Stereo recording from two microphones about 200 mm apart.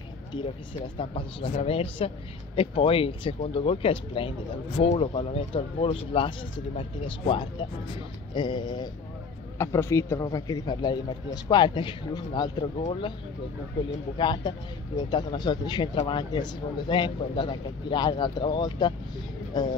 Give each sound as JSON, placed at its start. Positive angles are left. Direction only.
{"t": 0.9, "sound": "a man's voice", "side_deg": 25}
{"t": 13.8, "sound": "speech", "side_deg": 20}